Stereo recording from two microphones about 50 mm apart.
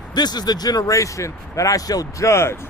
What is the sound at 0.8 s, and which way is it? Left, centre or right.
Speech, left.